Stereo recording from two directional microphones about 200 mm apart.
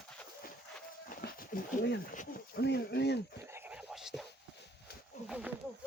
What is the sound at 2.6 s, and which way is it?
Speech, 55° left (ahead or behind).